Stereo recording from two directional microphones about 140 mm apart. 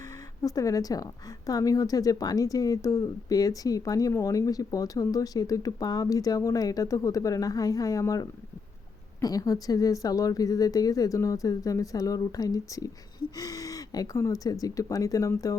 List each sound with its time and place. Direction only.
0.4 s a woman's voice: 25° left (ahead or behind)